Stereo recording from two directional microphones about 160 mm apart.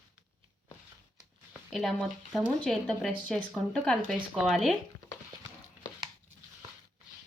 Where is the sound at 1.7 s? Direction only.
Centre (ahead or behind).